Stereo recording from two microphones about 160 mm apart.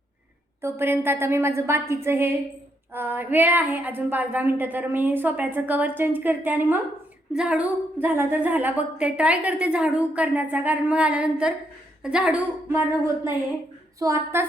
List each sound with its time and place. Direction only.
0.6 s a woman's voice: 15° right (ahead or behind)
12.6 s a woman's voice: 15° right (ahead or behind)